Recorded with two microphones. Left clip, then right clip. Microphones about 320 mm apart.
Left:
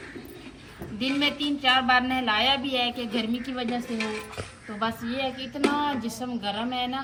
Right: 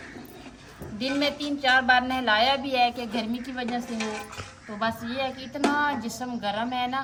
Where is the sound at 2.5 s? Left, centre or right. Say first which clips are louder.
Right 3 dB; right.